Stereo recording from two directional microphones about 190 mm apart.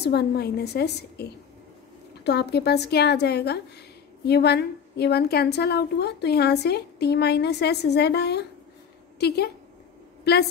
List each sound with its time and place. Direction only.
0.0 s a woman's voice: 60° left (ahead or behind)
2.2 s a woman's voice: 60° left (ahead or behind)